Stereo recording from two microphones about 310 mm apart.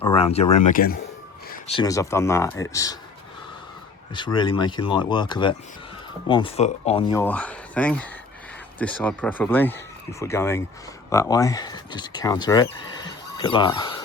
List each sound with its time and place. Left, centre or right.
0.0 s speech: centre
4.1 s speech: centre
7.1 s speech: centre
13.0 s a sound: centre